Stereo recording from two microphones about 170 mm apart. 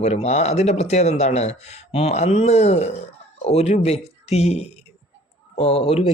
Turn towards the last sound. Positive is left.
turn(degrees=35)  # may be behind; listen again after turning